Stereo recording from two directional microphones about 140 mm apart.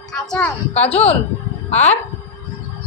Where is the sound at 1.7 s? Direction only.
55° left (ahead or behind).